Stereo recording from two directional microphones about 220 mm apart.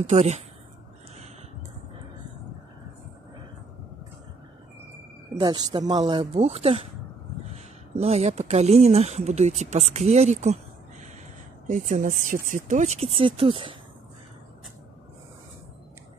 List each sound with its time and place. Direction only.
0.1 s speech: 30° right (ahead or behind)
5.4 s speech: 20° right (ahead or behind)